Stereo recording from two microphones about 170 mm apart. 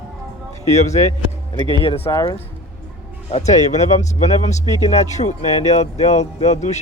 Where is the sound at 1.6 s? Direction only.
30° right (ahead or behind).